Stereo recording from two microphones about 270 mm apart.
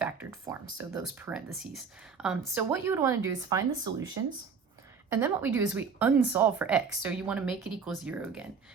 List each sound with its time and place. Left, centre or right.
0.0 s speech: centre